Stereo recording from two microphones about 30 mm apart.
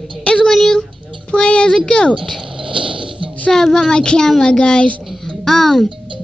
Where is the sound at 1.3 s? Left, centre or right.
Left.